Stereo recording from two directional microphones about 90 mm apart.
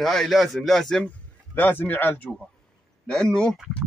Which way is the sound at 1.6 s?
20° left (ahead or behind).